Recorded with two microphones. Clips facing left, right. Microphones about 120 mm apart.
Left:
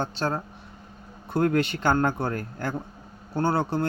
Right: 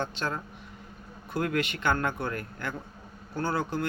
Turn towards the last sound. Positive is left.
turn(degrees=35)  # may be behind; listen again after turning